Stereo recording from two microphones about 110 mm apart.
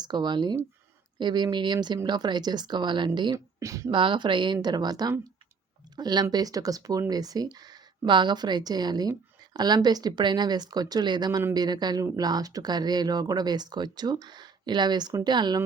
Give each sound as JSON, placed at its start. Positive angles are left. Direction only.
{"t": 0.0, "sound": "a woman's voice", "side_deg": -40}
{"t": 3.3, "sound": "speech", "side_deg": -30}
{"t": 3.9, "sound": "a woman's voice", "side_deg": -50}